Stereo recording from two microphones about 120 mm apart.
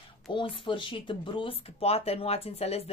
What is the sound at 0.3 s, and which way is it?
Speech, 40° left (ahead or behind).